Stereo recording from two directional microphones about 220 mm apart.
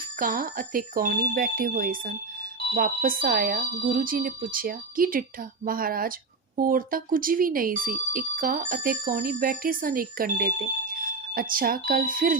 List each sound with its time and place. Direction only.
0.2 s speech: 40° right (ahead or behind)